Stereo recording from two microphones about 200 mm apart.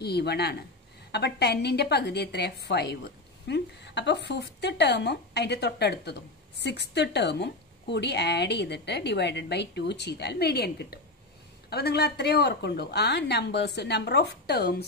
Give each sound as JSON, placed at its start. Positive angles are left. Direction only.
{"t": 0.0, "sound": "a woman's voice", "side_deg": 55}